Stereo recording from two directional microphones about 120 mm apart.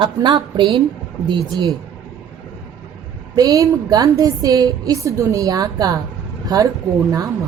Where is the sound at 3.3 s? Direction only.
30° right (ahead or behind).